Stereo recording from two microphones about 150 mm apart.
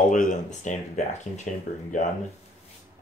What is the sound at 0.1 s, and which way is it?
Speech, 60° left (ahead or behind).